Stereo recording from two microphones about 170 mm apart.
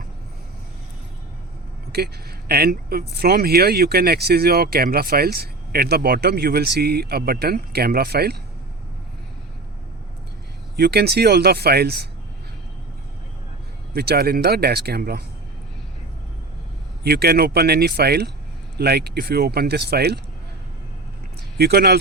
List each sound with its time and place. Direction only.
2.5 s speech: 65° right (ahead or behind)
10.8 s speech: 75° right (ahead or behind)
13.9 s speech: 65° right (ahead or behind)
17.0 s speech: 70° right (ahead or behind)
21.6 s speech: 65° right (ahead or behind)